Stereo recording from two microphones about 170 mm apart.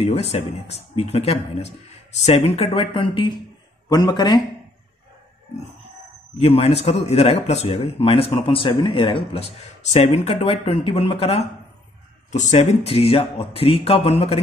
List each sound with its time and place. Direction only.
0.0 s a man's voice: 35° left (ahead or behind)
6.3 s speech: 35° left (ahead or behind)